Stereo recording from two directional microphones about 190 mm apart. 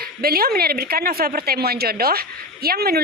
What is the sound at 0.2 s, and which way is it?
A woman's voice, 50° right (ahead or behind).